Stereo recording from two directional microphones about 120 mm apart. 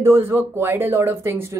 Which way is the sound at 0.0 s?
20° right (ahead or behind).